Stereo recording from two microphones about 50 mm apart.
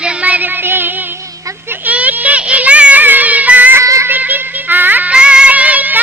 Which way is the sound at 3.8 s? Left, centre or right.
Right.